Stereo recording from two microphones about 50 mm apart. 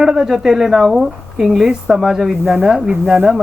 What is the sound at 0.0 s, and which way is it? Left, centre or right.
A woman's voice, centre.